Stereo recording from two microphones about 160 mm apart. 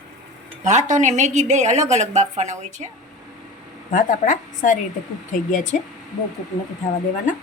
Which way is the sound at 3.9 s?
55° left (ahead or behind).